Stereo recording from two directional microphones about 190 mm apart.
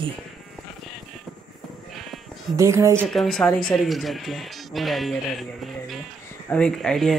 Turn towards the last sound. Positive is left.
turn(degrees=0)  # may be behind; listen again after turning